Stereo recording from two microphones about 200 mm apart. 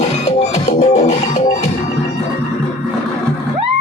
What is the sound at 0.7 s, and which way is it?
Music, 35° left (ahead or behind).